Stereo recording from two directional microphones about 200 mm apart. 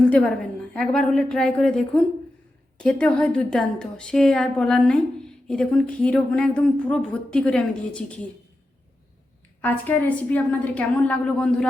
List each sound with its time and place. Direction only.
0.0 s speech: 5° left (ahead or behind)
9.6 s a woman's voice: 10° left (ahead or behind)